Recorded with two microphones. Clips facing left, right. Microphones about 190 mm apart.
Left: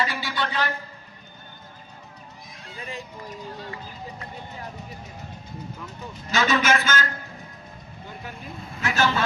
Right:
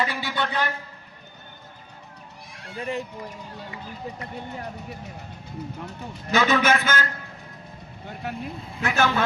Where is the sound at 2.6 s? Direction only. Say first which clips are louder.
Right 7 dB; 65° right (ahead or behind).